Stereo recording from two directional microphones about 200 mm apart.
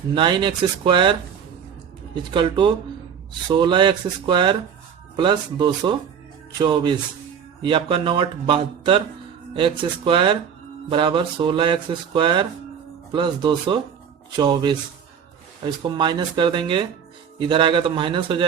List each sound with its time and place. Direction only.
0.1 s speech: 25° right (ahead or behind)
2.1 s speech: 25° right (ahead or behind)